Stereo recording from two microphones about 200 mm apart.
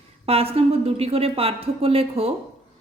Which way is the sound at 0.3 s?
30° right (ahead or behind).